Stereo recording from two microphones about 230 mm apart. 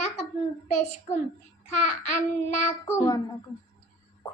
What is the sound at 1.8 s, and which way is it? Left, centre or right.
Child singing, left.